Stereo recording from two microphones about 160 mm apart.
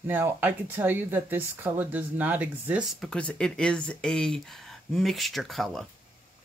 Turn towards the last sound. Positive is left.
turn(degrees=0)  # may be behind; listen again after turning